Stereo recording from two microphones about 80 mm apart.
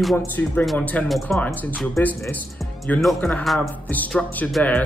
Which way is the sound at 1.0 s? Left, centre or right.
Centre.